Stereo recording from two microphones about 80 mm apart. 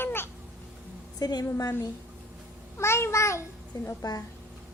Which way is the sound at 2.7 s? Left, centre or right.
Left.